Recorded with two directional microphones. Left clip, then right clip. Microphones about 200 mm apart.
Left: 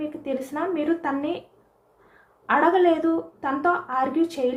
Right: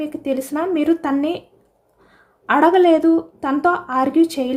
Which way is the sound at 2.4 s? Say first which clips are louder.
Right 5 dB; 60° right (ahead or behind).